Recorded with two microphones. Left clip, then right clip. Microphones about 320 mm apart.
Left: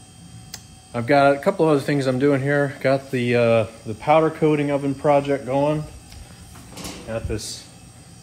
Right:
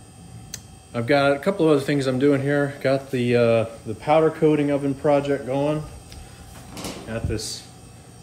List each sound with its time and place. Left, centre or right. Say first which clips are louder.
0.5 s speech: left 1 dB; centre
7.1 s speech: left 2 dB; centre